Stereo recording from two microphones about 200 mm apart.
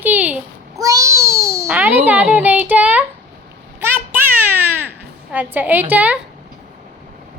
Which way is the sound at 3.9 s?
10° right (ahead or behind).